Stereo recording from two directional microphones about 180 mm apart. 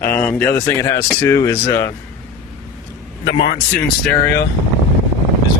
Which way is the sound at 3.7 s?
10° left (ahead or behind).